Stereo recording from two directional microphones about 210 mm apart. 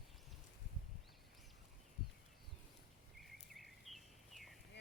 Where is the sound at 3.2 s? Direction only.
Centre (ahead or behind).